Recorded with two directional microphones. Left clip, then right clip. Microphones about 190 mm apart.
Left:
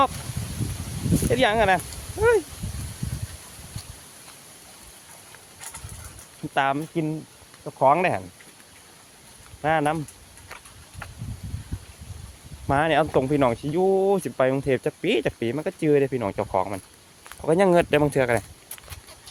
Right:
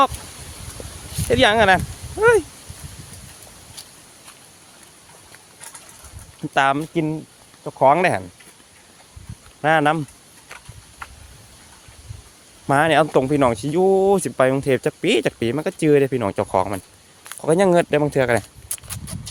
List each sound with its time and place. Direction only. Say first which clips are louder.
1.3 s speech: right 6 dB; 25° right (ahead or behind)
6.5 s speech: right 5 dB; 25° right (ahead or behind)
9.6 s speech: right 6 dB; 30° right (ahead or behind)
12.6 s speech: right 5 dB; 20° right (ahead or behind)
18.0 s a sound: right 3 dB; 10° right (ahead or behind); by 19.3 s 30° right (ahead or behind)